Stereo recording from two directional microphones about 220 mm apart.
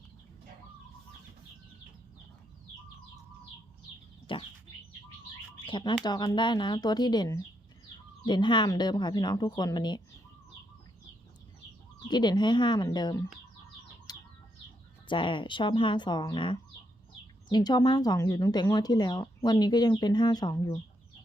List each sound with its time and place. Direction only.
4.3 s speech: 20° left (ahead or behind)
5.6 s speech: 20° left (ahead or behind)
11.9 s speech: 20° left (ahead or behind)
14.1 s bird: 20° left (ahead or behind)
15.0 s speech: 20° left (ahead or behind)